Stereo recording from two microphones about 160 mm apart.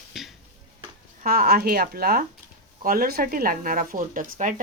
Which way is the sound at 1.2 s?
65° right (ahead or behind).